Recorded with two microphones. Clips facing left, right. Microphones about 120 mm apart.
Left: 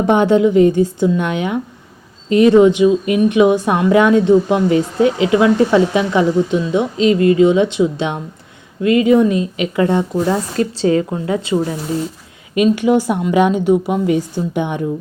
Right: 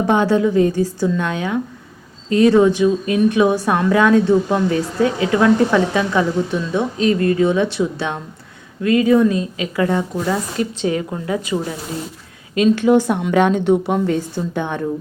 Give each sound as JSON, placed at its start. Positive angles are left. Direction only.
{"t": 0.1, "sound": "a woman's voice", "side_deg": 20}
{"t": 12.5, "sound": "a woman's voice", "side_deg": 15}